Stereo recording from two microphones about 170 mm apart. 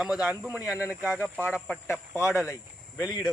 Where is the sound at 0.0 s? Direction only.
5° right (ahead or behind).